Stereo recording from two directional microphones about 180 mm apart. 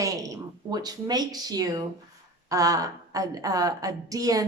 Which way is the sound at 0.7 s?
20° right (ahead or behind).